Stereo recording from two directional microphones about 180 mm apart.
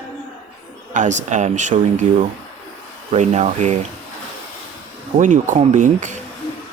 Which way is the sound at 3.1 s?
40° right (ahead or behind).